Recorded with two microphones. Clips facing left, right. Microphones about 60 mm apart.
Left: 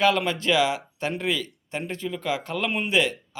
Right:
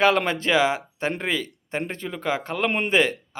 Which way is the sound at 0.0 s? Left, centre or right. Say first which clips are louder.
Right 2 dB; right.